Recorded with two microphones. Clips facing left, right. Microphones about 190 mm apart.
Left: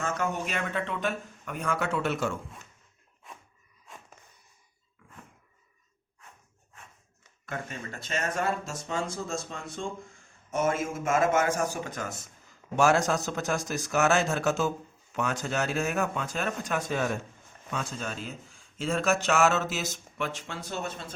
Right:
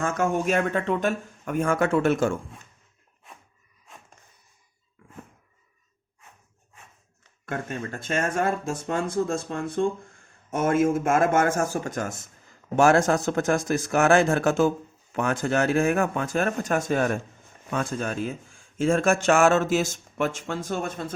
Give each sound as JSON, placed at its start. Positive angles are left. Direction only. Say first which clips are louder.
{"t": 0.0, "sound": "speech", "louder": "right 6 dB", "side_deg": -50}
{"t": 7.4, "sound": "speech", "louder": "right 6 dB", "side_deg": -50}